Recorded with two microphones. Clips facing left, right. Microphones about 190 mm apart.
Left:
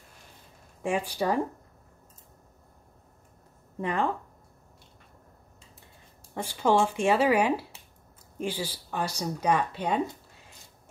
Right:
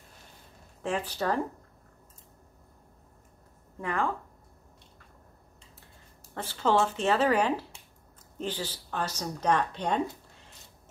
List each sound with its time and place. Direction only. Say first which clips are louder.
0.8 s a woman's voice: left 2 dB; 10° left (ahead or behind)
3.8 s speech: left 2 dB; 20° left (ahead or behind)
6.3 s a woman's voice: left 2 dB; 15° left (ahead or behind)